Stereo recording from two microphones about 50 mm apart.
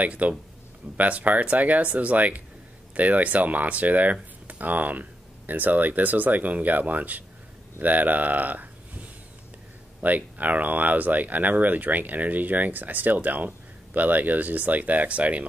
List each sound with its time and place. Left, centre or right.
0.0 s speech: right
10.0 s speech: right